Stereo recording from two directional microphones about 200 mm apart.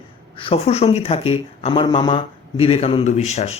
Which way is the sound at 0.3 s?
30° left (ahead or behind).